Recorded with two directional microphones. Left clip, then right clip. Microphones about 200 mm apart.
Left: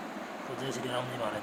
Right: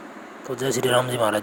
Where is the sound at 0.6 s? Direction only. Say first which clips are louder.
Right 15 dB; 45° right (ahead or behind).